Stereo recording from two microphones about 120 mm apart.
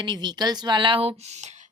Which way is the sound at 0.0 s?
40° right (ahead or behind).